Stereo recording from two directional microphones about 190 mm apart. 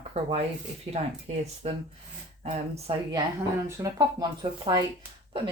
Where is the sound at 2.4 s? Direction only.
30° right (ahead or behind).